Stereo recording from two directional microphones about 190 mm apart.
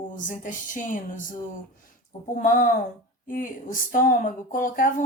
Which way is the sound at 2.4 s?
45° left (ahead or behind).